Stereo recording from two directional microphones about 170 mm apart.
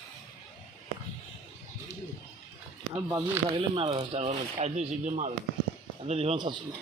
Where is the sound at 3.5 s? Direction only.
30° right (ahead or behind).